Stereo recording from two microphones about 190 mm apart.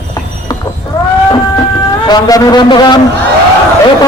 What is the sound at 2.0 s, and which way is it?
Speech, 20° left (ahead or behind).